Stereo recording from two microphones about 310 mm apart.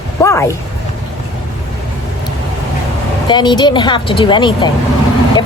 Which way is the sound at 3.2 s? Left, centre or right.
Centre.